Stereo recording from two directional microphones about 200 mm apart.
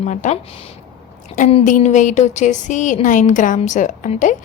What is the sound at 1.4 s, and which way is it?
A woman's voice, 35° left (ahead or behind).